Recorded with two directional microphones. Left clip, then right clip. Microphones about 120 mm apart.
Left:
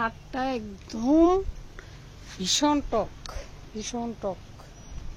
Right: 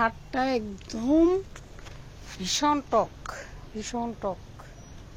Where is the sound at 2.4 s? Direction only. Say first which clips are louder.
Left 1 dB; 55° left (ahead or behind).